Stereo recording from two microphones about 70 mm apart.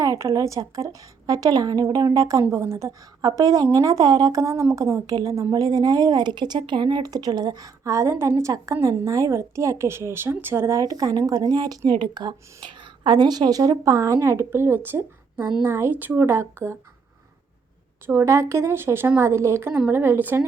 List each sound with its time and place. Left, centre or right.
0.0 s a woman's voice: right
1.3 s speech: right
2.1 s speech: right
2.4 s speech: right
3.2 s speech: right
4.4 s a woman's voice: right
7.9 s a woman's voice: right
8.1 s a woman's voice: right
10.8 s speech: right
13.1 s a woman's voice: right
18.0 s speech: right